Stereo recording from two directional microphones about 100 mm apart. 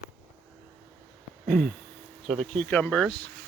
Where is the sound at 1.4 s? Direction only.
Centre (ahead or behind).